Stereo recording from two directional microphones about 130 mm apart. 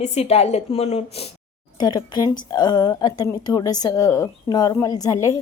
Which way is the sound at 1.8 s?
30° left (ahead or behind).